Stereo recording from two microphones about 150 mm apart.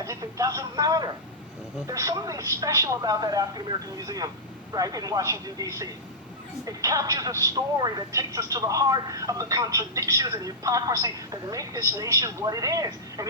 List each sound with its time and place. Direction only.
0.0 s speech: 20° right (ahead or behind)